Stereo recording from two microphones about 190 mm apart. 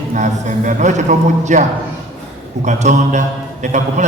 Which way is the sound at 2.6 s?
40° right (ahead or behind).